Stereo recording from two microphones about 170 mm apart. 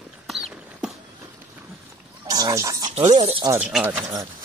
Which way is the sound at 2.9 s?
40° right (ahead or behind).